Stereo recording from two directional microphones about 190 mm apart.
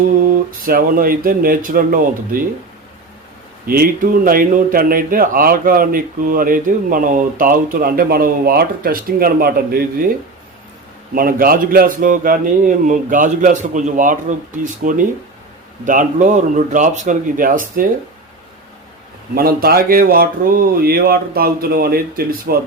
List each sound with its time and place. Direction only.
0.2 s speech: 50° right (ahead or behind)
3.7 s speech: 50° right (ahead or behind)
11.1 s speech: 50° right (ahead or behind)
19.3 s speech: 50° right (ahead or behind)